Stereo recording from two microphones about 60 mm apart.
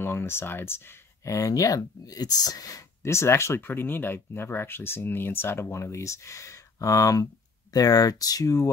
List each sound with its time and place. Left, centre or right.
0.0 s speech: left
1.3 s speech: left
3.0 s speech: left
3.6 s speech: left
7.7 s speech: left